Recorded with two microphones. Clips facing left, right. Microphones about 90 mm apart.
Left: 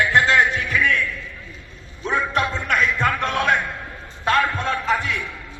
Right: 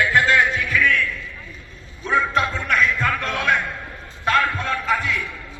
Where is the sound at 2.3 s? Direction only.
20° left (ahead or behind).